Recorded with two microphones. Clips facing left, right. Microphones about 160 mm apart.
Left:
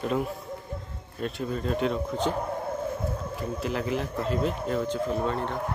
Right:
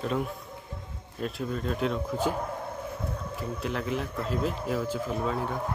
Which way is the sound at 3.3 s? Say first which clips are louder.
Left 1 dB; centre (ahead or behind).